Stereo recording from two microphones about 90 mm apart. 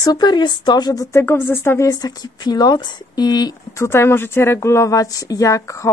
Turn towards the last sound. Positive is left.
turn(degrees=35)  # may be behind; listen again after turning